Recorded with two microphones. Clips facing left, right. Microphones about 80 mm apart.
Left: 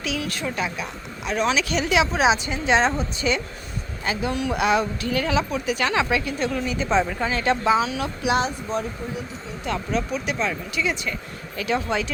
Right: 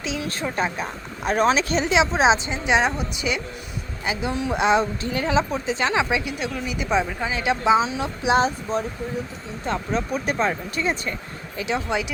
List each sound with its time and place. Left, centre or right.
0.0 s speech: right
11.5 s speech: right